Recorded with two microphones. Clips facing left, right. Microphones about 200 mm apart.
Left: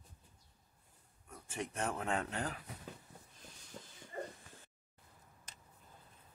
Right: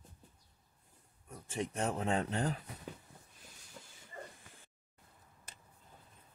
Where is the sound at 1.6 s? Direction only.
25° right (ahead or behind).